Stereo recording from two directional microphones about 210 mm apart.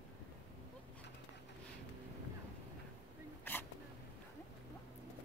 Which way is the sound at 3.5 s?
10° left (ahead or behind).